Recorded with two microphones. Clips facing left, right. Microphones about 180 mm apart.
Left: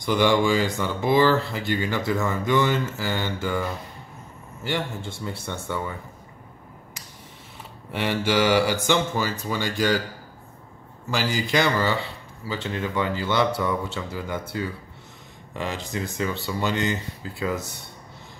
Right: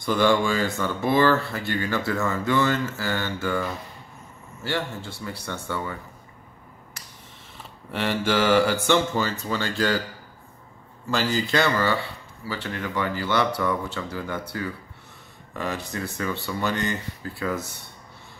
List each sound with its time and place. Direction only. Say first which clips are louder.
0.0 s speech: left 1 dB; 15° left (ahead or behind)
4.6 s speech: even; 20° left (ahead or behind)
7.9 s speech: even; 15° left (ahead or behind)
11.1 s speech: right 1 dB; 10° left (ahead or behind)
15.5 s speech: even; 20° left (ahead or behind)